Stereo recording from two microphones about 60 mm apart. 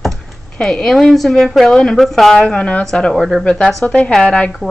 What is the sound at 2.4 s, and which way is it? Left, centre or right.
A woman's voice, centre.